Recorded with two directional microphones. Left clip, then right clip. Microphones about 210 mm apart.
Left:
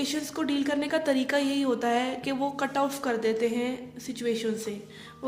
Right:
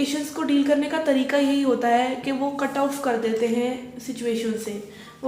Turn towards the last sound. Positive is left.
turn(degrees=50)  # may be behind; listen again after turning